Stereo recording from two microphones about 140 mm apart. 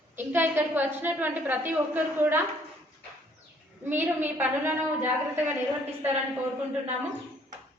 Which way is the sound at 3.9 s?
15° right (ahead or behind).